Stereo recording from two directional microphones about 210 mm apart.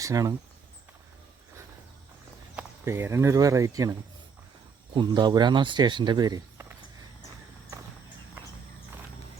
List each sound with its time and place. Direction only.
0.0 s speech: 15° right (ahead or behind)
2.6 s speech: 10° right (ahead or behind)
4.9 s speech: 20° right (ahead or behind)